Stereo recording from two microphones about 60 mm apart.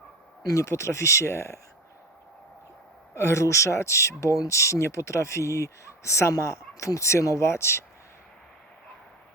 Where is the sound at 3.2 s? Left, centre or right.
Left.